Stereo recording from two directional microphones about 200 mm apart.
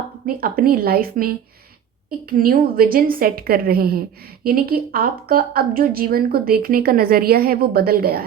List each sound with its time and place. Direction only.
0.3 s a woman's voice: 45° right (ahead or behind)